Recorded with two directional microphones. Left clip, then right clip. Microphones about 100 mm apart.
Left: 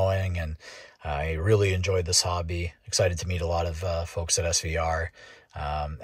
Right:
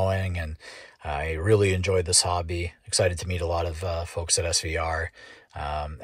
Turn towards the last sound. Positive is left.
turn(degrees=30)  # may be behind; listen again after turning